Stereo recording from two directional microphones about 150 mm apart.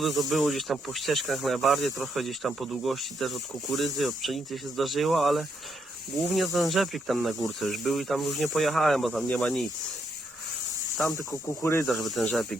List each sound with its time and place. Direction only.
0.0 s speech: centre (ahead or behind)
10.9 s speech: centre (ahead or behind)
11.6 s speech: 20° left (ahead or behind)
11.9 s speech: centre (ahead or behind)